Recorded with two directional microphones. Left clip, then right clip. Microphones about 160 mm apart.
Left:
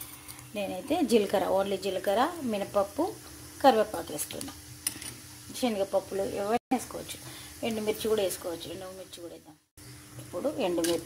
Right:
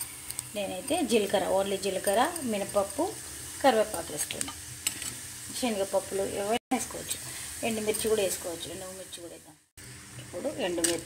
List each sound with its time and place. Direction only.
0.6 s a woman's voice: 10° left (ahead or behind)
5.6 s a woman's voice: 5° left (ahead or behind)
7.6 s a woman's voice: 5° left (ahead or behind)
10.4 s speech: 20° left (ahead or behind)